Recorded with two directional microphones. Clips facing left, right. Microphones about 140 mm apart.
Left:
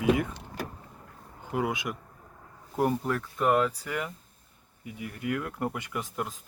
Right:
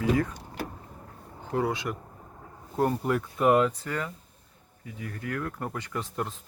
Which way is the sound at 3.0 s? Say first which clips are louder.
Right 3 dB; 5° right (ahead or behind).